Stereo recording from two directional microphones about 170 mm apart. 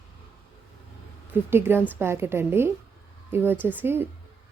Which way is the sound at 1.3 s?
15° right (ahead or behind).